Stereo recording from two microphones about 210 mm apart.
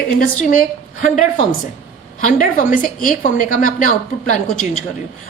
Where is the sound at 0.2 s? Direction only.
40° left (ahead or behind).